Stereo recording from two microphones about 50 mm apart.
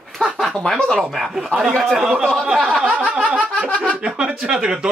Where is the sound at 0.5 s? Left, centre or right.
Centre.